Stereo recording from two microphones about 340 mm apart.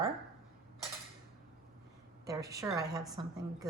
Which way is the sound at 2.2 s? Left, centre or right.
Centre.